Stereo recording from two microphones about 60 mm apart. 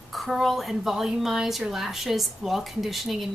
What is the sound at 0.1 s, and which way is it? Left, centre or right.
A woman's voice, centre.